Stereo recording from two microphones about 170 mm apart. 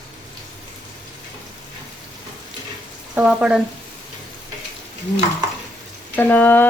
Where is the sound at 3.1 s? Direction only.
5° right (ahead or behind).